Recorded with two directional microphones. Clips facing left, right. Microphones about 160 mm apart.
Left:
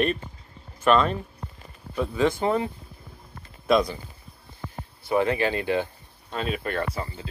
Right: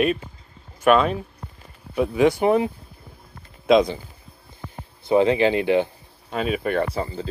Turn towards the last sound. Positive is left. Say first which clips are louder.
# right 5 dB
turn(degrees=-30)  # may be behind; listen again after turning